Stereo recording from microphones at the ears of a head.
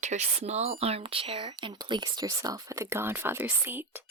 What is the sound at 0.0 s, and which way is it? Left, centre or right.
Speech, right.